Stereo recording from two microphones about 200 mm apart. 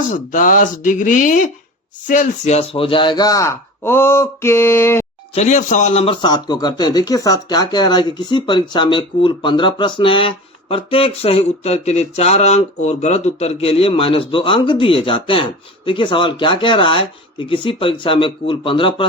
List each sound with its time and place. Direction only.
0.1 s speech: 40° left (ahead or behind); by 5.0 s 10° left (ahead or behind)
5.3 s speech: 35° left (ahead or behind)